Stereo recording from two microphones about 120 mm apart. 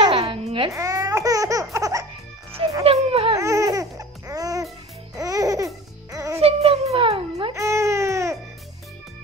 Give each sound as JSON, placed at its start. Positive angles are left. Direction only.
{"t": 0.0, "sound": "babbling", "side_deg": -45}
{"t": 0.7, "sound": "baby laughter", "side_deg": -30}
{"t": 2.8, "sound": "a sound", "side_deg": -55}
{"t": 3.3, "sound": "baby cry", "side_deg": -25}
{"t": 4.3, "sound": "music", "side_deg": -30}
{"t": 6.4, "sound": "music", "side_deg": -55}
{"t": 7.5, "sound": "baby cry", "side_deg": -25}